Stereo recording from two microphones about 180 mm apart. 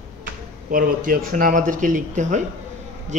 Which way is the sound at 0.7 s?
50° right (ahead or behind).